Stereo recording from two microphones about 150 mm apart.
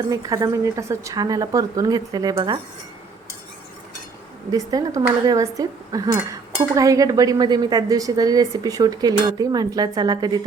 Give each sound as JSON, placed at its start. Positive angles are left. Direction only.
{"t": 0.1, "sound": "speech", "side_deg": -25}
{"t": 4.5, "sound": "speech", "side_deg": -25}